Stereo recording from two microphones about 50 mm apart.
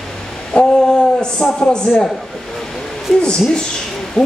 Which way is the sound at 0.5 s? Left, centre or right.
Centre.